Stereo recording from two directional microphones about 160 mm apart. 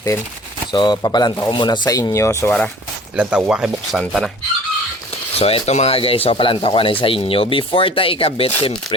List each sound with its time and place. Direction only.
0.7 s speech: 25° left (ahead or behind)
3.2 s speech: 5° right (ahead or behind)
5.4 s speech: 40° left (ahead or behind)